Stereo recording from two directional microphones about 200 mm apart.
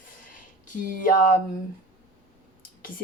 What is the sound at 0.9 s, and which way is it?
Speech, 45° left (ahead or behind).